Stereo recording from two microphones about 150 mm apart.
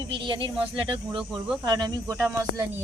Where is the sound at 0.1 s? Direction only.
35° right (ahead or behind).